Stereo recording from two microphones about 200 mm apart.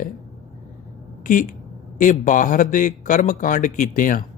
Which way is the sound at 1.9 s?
40° left (ahead or behind).